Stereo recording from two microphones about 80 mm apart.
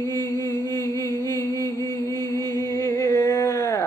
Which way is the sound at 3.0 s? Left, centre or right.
Left.